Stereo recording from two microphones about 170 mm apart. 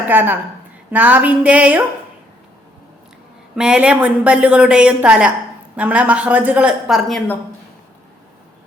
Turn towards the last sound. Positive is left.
turn(degrees=0)  # may be behind; listen again after turning